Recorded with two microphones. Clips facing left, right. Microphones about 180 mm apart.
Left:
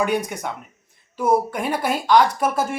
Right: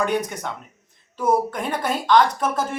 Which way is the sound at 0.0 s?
10° left (ahead or behind).